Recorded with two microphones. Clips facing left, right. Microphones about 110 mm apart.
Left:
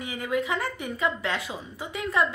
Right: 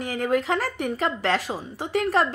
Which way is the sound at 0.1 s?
60° right (ahead or behind).